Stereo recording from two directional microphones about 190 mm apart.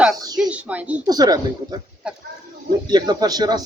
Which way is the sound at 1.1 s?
20° right (ahead or behind).